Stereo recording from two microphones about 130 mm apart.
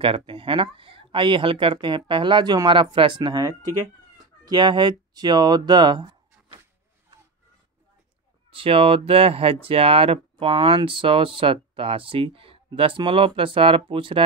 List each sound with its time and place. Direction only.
0.0 s speech: 45° right (ahead or behind)
8.5 s speech: 45° right (ahead or behind)